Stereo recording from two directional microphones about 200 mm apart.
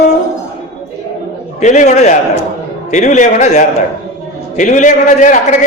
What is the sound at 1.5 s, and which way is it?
A man's voice, 35° left (ahead or behind).